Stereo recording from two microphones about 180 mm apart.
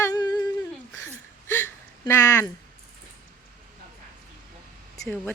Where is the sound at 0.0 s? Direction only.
20° left (ahead or behind).